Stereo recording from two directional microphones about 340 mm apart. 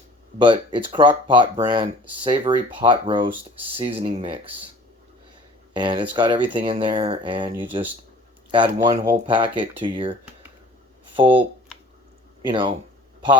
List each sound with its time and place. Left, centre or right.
0.3 s speech: centre
5.7 s speech: centre
12.5 s speech: centre